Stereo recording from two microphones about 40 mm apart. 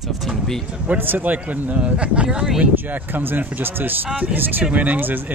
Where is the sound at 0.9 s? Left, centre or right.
Right.